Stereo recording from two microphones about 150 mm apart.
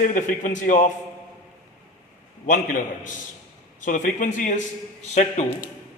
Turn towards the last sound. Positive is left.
turn(degrees=50)  # may be behind; listen again after turning